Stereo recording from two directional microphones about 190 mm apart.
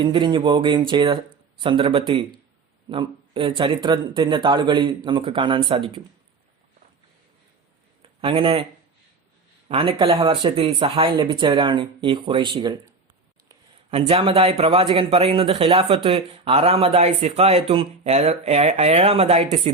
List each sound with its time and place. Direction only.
0.0 s speech: 25° right (ahead or behind)
8.2 s speech: 30° right (ahead or behind)
9.6 s speech: 30° right (ahead or behind)
14.1 s speech: 30° right (ahead or behind)